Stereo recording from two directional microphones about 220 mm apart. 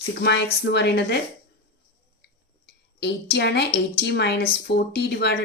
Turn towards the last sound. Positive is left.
turn(degrees=45)  # may be behind; listen again after turning